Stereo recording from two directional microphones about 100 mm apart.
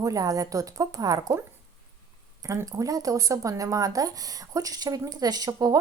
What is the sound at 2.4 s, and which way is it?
Speech, 35° right (ahead or behind).